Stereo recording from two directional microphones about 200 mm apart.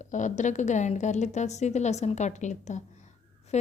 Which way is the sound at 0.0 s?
35° left (ahead or behind).